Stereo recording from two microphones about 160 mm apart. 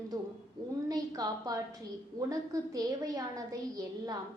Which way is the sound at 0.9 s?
25° right (ahead or behind).